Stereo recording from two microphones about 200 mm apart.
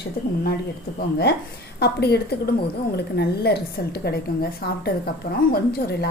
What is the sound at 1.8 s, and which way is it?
A woman's voice, 55° left (ahead or behind).